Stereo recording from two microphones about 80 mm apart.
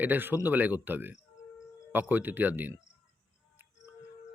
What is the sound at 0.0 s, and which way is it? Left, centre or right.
Speech, right.